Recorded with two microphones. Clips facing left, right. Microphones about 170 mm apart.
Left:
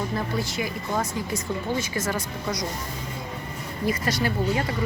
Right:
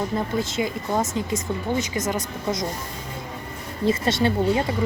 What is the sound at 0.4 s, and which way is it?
Speech, 25° right (ahead or behind).